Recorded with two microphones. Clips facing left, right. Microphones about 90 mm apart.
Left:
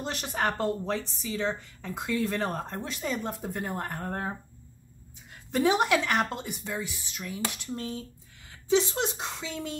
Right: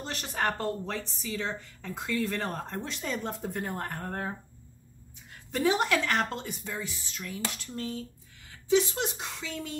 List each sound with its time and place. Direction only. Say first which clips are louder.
0.0 s a woman's voice: left 1 dB; 15° left (ahead or behind)
5.5 s a woman's voice: left 2 dB; 15° left (ahead or behind)